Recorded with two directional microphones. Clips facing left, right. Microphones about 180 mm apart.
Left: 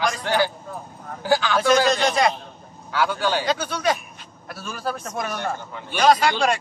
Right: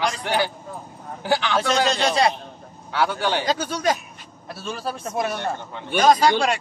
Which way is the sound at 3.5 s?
40° right (ahead or behind).